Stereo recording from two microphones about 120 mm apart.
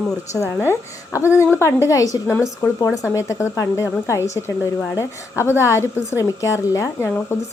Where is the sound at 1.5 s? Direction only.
25° left (ahead or behind).